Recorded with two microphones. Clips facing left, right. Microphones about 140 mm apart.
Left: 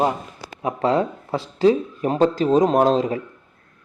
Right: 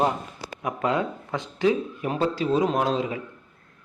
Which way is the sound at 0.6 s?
35° left (ahead or behind).